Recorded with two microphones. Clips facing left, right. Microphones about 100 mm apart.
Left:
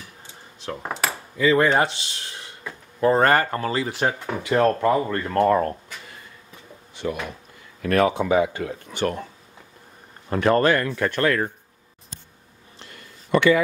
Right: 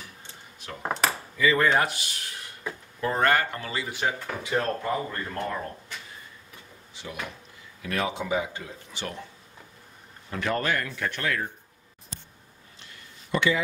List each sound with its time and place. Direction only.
0.8 s cutlery: centre (ahead or behind)
1.4 s speech: 30° left (ahead or behind)
3.0 s speech: 35° left (ahead or behind)
4.4 s speech: 70° left (ahead or behind)
7.0 s speech: 55° left (ahead or behind)
10.3 s speech: 45° left (ahead or behind)
12.9 s a sound: 60° left (ahead or behind)